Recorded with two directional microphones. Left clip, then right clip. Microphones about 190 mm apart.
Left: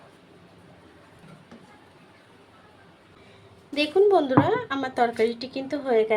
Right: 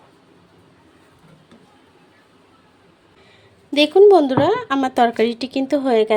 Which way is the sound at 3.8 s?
50° right (ahead or behind).